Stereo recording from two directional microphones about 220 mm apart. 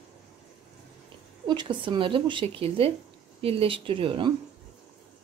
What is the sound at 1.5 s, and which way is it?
Speech, 20° right (ahead or behind).